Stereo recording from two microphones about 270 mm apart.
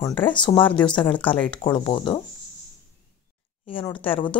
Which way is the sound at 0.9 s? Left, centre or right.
Centre.